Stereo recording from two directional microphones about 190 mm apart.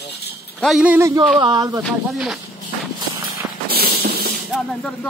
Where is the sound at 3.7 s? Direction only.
55° right (ahead or behind).